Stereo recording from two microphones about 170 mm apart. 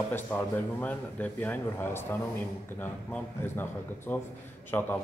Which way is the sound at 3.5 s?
10° left (ahead or behind).